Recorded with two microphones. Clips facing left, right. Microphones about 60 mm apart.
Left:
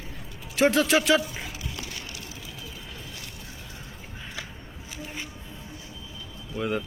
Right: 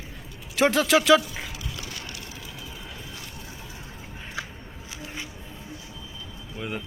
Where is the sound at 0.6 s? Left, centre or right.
Right.